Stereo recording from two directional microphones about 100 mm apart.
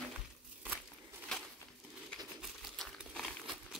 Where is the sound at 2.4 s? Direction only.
Centre (ahead or behind).